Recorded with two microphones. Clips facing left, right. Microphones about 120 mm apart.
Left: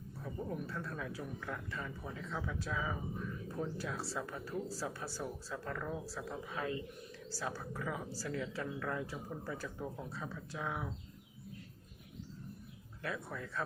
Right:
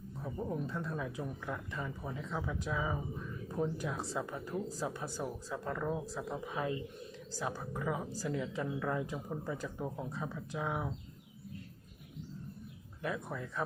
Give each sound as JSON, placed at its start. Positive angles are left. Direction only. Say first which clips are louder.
{"t": 0.2, "sound": "speech", "louder": "right 3 dB", "side_deg": -15}
{"t": 13.0, "sound": "speech", "louder": "right 3 dB", "side_deg": -20}